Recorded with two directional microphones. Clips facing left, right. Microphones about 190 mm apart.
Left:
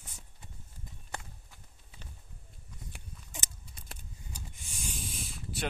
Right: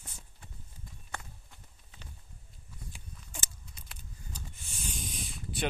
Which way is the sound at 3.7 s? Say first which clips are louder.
Left 3 dB; 50° left (ahead or behind).